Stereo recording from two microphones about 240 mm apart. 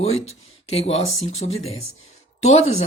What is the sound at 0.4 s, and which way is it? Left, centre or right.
Speech, left.